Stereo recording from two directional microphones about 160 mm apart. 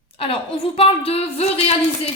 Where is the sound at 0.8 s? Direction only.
35° left (ahead or behind).